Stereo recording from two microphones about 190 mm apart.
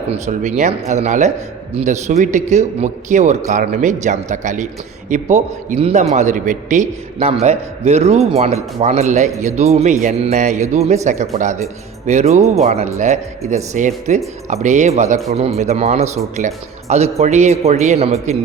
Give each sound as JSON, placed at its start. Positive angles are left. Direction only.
{"t": 0.1, "sound": "a man's voice", "side_deg": -40}